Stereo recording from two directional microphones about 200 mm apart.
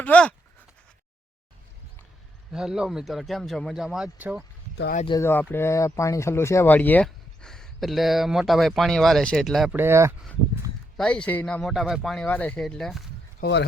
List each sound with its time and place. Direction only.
0.0 s speech: 5° left (ahead or behind)
2.5 s speech: 5° right (ahead or behind)
5.0 s speech: 15° left (ahead or behind)
9.7 s speech: 10° right (ahead or behind)
10.9 s speech: 5° left (ahead or behind)
13.4 s speech: 60° left (ahead or behind)